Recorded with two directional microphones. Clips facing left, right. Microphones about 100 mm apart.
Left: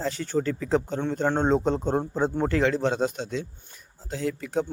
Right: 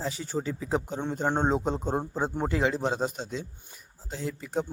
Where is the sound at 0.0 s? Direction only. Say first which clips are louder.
Left 5 dB; 5° right (ahead or behind).